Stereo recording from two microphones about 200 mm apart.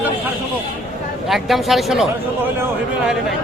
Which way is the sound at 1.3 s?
Centre (ahead or behind).